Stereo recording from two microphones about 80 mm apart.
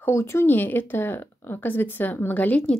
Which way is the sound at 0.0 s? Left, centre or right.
Left.